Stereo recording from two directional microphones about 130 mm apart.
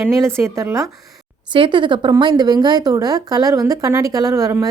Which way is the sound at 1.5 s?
40° right (ahead or behind).